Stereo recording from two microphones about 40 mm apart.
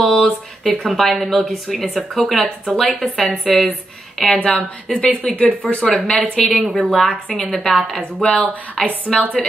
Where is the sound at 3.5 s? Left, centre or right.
Centre.